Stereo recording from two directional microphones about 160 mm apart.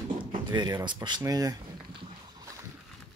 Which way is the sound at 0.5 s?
25° right (ahead or behind).